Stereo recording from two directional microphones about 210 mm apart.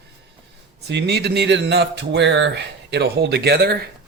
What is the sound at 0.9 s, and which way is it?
Speech, 55° right (ahead or behind).